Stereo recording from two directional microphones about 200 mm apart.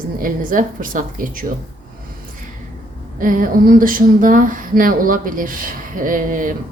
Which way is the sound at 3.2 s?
45° right (ahead or behind).